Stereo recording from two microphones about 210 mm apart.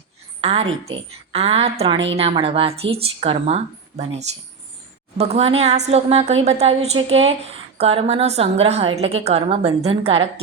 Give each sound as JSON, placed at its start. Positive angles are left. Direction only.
{"t": 0.4, "sound": "a woman's voice", "side_deg": -30}